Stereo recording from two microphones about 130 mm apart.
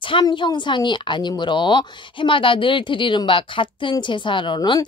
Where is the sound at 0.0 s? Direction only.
40° left (ahead or behind).